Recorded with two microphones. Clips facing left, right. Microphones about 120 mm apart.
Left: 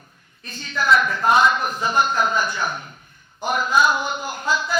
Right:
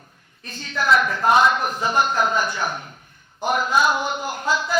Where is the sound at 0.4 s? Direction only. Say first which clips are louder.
Even; 60° right (ahead or behind).